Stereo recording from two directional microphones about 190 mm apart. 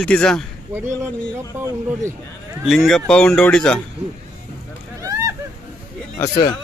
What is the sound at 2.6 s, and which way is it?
Speech, centre (ahead or behind).